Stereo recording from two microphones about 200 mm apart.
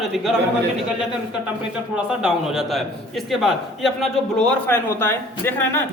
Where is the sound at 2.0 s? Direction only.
5° right (ahead or behind).